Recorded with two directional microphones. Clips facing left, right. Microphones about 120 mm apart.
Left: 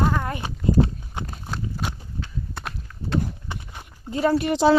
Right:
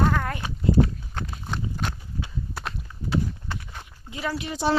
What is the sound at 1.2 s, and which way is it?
Horse, 15° left (ahead or behind).